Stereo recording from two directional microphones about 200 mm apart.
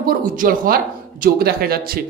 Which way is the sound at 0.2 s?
45° right (ahead or behind).